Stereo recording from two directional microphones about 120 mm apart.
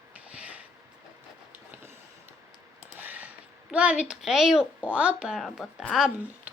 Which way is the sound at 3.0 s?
15° right (ahead or behind).